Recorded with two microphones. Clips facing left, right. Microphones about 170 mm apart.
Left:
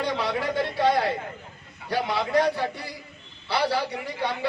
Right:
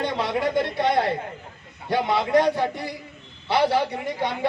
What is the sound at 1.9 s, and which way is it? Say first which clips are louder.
A man's voice: right 4 dB; 20° right (ahead or behind).